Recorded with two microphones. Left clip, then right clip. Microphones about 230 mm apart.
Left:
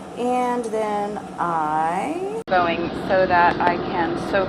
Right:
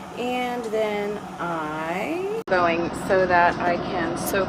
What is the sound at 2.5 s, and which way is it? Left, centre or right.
Speech, right.